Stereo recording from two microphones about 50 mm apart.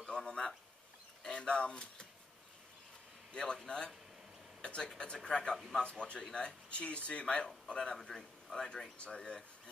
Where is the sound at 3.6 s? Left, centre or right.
Centre.